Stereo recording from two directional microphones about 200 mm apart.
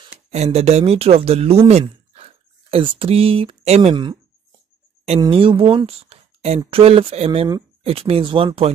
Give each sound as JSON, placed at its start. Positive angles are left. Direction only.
{"t": 0.0, "sound": "speech", "side_deg": -35}
{"t": 5.2, "sound": "speech", "side_deg": -25}